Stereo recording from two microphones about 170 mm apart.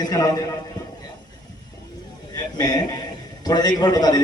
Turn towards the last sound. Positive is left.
turn(degrees=25)  # may be behind; listen again after turning